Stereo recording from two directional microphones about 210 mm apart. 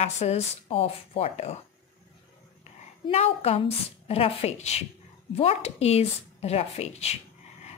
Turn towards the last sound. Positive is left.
turn(degrees=30)  # may be behind; listen again after turning